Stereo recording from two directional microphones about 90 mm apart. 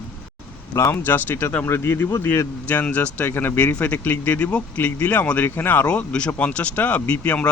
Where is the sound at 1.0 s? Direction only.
20° left (ahead or behind).